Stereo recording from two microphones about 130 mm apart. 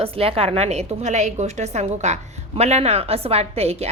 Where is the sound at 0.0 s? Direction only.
45° right (ahead or behind).